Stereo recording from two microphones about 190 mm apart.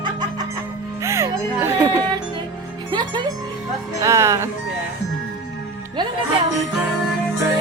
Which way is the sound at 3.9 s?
15° right (ahead or behind).